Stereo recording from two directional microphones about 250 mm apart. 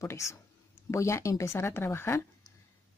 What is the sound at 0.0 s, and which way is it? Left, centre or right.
Speech, centre.